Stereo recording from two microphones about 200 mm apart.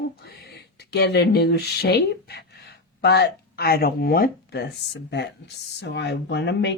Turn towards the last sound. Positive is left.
turn(degrees=60)  # may be behind; listen again after turning